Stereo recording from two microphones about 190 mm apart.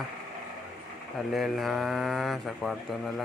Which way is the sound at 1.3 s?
Centre (ahead or behind).